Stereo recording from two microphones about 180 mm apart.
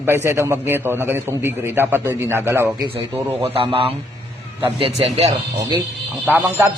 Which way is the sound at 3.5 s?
30° right (ahead or behind).